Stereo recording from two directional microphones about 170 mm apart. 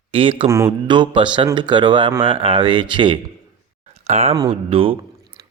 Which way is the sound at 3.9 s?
40° right (ahead or behind).